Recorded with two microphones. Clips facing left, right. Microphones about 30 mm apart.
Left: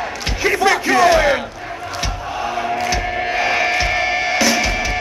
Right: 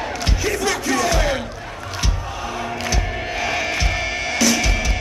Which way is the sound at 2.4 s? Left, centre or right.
Centre.